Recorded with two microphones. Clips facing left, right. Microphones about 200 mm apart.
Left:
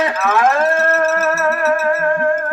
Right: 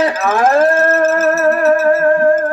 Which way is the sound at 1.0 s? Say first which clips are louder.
Right 4 dB; 45° right (ahead or behind).